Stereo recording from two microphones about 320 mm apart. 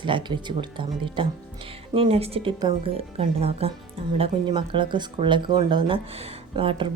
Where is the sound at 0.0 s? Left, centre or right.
Centre.